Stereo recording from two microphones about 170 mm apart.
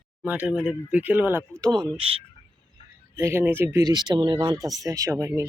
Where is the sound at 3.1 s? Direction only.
15° right (ahead or behind).